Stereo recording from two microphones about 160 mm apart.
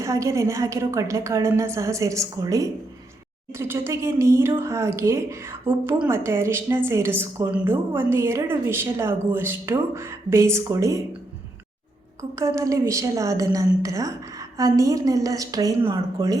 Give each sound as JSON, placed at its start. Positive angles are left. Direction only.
{"t": 0.0, "sound": "a woman's voice", "side_deg": -20}
{"t": 12.5, "sound": "a woman's voice", "side_deg": -20}